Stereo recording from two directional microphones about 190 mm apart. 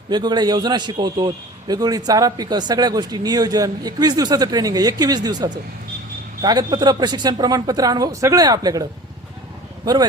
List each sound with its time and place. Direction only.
0.1 s a man's voice: 20° right (ahead or behind)
9.8 s speech: 20° right (ahead or behind)